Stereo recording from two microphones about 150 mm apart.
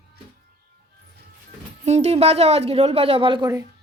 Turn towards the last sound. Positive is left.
turn(degrees=-35)  # may be behind; listen again after turning